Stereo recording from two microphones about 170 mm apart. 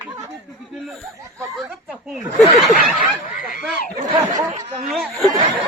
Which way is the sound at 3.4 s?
55° left (ahead or behind).